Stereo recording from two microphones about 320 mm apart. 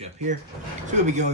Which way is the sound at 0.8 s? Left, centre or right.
Right.